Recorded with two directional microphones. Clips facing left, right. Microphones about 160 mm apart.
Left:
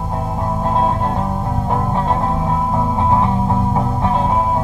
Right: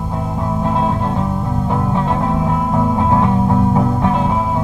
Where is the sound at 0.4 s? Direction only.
35° left (ahead or behind).